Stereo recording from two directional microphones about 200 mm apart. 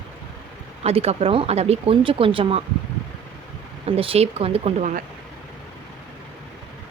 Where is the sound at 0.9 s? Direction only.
30° right (ahead or behind).